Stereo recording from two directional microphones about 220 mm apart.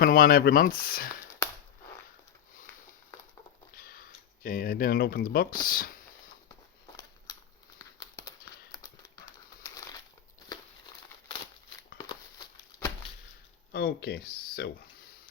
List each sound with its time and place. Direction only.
0.0 s speech: 40° left (ahead or behind)
3.8 s speech: 40° left (ahead or behind)
7.8 s a sound: 15° left (ahead or behind)
8.7 s crumpling: 15° left (ahead or behind)
11.9 s a sound: 20° left (ahead or behind)
13.7 s speech: 45° left (ahead or behind)